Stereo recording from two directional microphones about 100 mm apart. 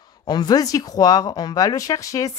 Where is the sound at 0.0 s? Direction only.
45° left (ahead or behind).